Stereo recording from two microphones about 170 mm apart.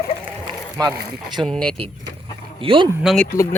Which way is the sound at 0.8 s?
25° right (ahead or behind).